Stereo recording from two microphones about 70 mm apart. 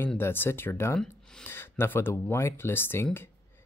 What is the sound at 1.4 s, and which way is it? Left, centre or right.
Speech, left.